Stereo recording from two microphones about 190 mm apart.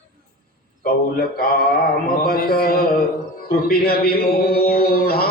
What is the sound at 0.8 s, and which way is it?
Speech, 50° left (ahead or behind).